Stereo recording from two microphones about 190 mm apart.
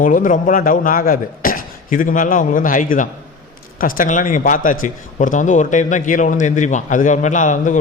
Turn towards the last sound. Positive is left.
turn(degrees=40)  # may be behind; listen again after turning